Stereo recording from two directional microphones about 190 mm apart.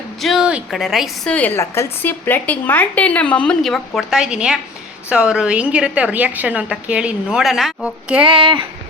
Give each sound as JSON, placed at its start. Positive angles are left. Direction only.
{"t": 0.2, "sound": "a woman's voice", "side_deg": 0}
{"t": 8.2, "sound": "speech", "side_deg": -25}